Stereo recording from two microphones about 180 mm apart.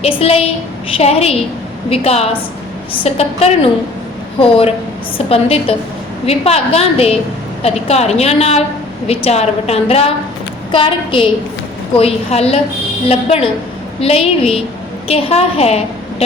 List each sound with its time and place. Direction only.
0.0 s a woman's voice: 35° left (ahead or behind)